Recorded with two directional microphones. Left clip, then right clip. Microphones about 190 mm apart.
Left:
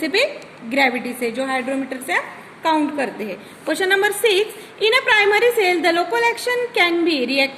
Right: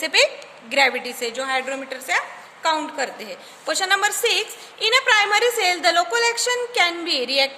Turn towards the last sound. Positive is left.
turn(degrees=-55)  # may be behind; listen again after turning